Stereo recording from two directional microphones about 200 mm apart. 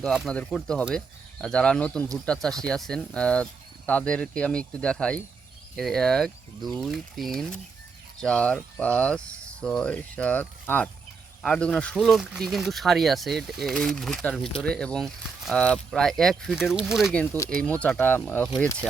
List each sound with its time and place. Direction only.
0.0 s speech: centre (ahead or behind)
17.1 s speech: 10° left (ahead or behind)